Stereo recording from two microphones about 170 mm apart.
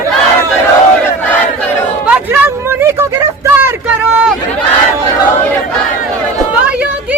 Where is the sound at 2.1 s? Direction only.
10° right (ahead or behind).